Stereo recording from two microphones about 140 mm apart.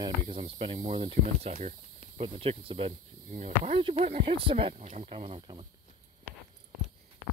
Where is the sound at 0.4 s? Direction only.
40° right (ahead or behind).